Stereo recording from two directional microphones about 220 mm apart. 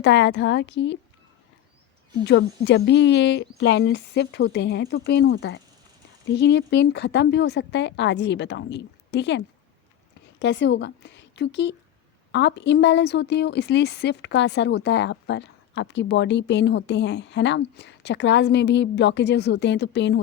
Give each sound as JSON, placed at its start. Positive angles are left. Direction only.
{"t": 0.0, "sound": "speech", "side_deg": 55}
{"t": 2.2, "sound": "speech", "side_deg": 50}
{"t": 10.4, "sound": "speech", "side_deg": 55}